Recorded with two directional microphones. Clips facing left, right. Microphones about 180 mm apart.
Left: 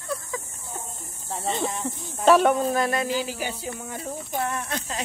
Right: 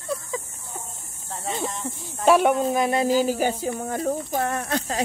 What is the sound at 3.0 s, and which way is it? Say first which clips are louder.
Speech: right 7 dB; 45° right (ahead or behind).